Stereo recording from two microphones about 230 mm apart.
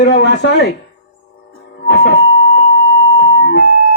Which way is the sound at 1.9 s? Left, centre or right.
Left.